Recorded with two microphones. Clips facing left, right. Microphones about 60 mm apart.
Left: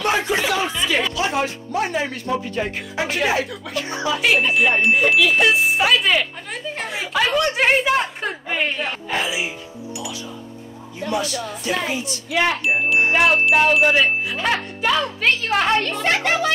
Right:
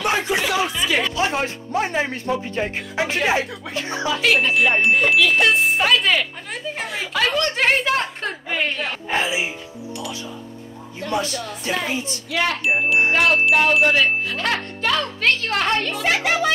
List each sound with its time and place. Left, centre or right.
0.0 s music: centre
1.1 s speech: right
4.2 s speech: centre
7.2 s chime: centre
9.1 s speech: right
11.1 s speech: right
12.3 s chime: centre
12.6 s speech: centre
13.1 s chime: centre
15.8 s speech: centre